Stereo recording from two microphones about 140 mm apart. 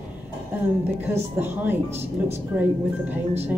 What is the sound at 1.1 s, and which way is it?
Speech, 15° right (ahead or behind).